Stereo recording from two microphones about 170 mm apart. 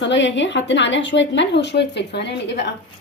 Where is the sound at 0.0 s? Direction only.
90° left.